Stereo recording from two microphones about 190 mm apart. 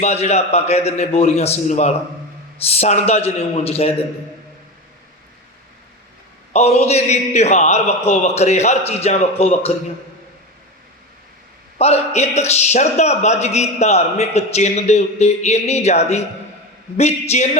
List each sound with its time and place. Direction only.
0.0 s a man's voice: 35° left (ahead or behind)
6.5 s a man's voice: 35° left (ahead or behind)
11.8 s a man's voice: 35° left (ahead or behind)